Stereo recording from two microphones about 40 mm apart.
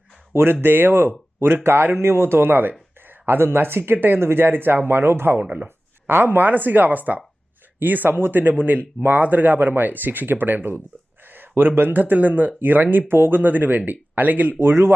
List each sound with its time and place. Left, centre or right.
0.6 s speech: right
1.4 s speech: right
4.9 s speech: right
5.4 s speech: right
5.6 s speech: right
14.6 s speech: right